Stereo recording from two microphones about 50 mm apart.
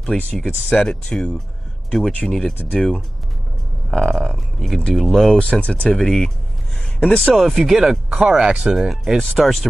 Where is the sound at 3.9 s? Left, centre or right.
Centre.